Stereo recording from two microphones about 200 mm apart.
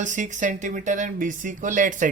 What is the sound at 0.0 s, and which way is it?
Speech, 40° right (ahead or behind).